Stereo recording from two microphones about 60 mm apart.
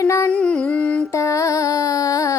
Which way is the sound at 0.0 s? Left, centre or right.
Left.